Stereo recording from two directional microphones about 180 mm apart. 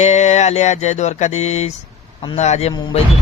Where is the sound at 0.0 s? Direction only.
40° left (ahead or behind).